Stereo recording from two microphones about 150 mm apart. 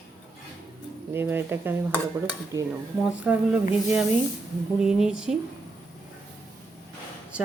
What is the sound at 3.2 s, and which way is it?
Speech, 10° right (ahead or behind).